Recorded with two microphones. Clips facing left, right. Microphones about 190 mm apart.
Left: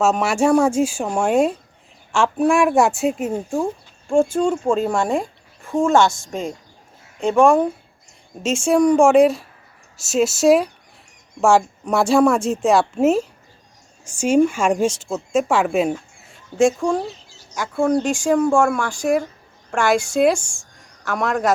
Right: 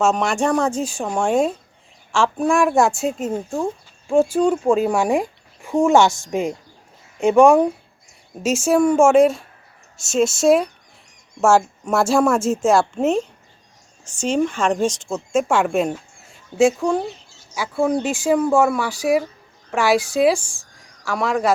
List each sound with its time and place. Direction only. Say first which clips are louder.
0.0 s a woman's voice: left 1 dB; 5° left (ahead or behind)
4.1 s a woman's voice: right 1 dB; 5° right (ahead or behind)
5.1 s speech: right 2 dB; 15° right (ahead or behind)
8.4 s a woman's voice: left 1 dB; 5° right (ahead or behind)